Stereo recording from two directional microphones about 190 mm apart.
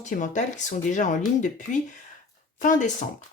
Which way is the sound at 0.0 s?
40° left (ahead or behind).